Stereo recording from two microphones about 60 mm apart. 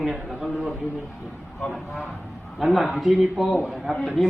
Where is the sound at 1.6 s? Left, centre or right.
Centre.